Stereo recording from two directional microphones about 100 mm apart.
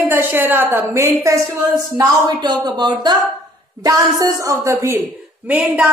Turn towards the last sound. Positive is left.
turn(degrees=-15)  # may be behind; listen again after turning